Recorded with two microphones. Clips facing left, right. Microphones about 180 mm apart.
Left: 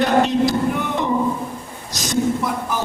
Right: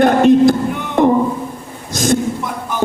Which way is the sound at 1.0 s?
50° right (ahead or behind).